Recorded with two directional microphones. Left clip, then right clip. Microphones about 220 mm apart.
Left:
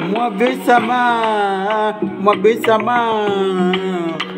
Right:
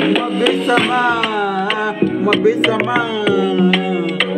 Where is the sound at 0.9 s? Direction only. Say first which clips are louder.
Left 1 dB; 10° left (ahead or behind).